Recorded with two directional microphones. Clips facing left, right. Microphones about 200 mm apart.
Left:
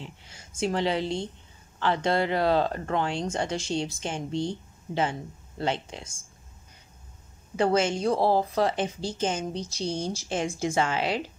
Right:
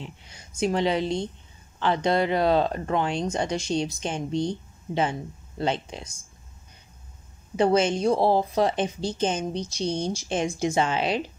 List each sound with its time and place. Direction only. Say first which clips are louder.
0.0 s a sound: right 2 dB; 20° right (ahead or behind)
0.6 s a woman's voice: right 3 dB; 20° right (ahead or behind)
7.5 s a woman's voice: right 3 dB; 20° right (ahead or behind)